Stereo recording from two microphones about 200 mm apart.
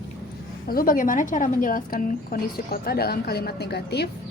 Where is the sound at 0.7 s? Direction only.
45° left (ahead or behind).